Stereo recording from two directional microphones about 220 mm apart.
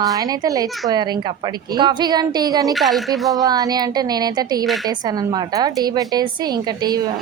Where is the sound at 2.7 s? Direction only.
Centre (ahead or behind).